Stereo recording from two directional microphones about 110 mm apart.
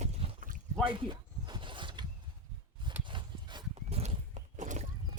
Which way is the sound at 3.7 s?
70° right (ahead or behind).